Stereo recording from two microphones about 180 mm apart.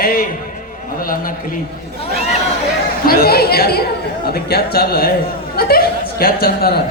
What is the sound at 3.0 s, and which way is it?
Speech, 60° left (ahead or behind).